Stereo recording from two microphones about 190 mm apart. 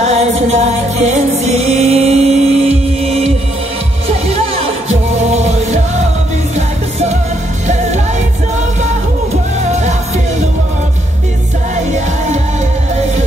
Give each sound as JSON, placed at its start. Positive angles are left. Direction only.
{"t": 0.0, "sound": "music", "side_deg": -35}
{"t": 4.3, "sound": "music", "side_deg": -35}